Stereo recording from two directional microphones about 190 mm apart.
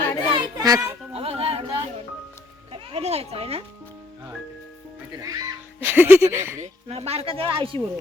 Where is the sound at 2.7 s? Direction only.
30° right (ahead or behind).